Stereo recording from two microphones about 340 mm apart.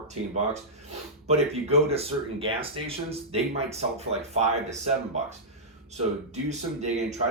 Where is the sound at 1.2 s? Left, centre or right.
Centre.